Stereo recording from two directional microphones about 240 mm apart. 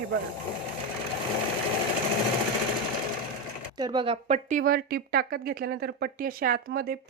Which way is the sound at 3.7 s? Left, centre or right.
Centre.